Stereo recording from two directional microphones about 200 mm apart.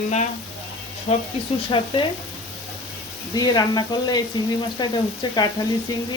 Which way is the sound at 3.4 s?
20° left (ahead or behind).